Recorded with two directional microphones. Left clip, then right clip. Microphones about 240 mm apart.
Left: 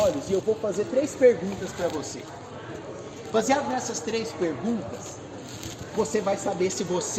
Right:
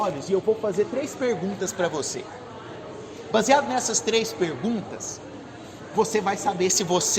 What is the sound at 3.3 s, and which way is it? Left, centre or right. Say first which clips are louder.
Speech: right 4 dB; right.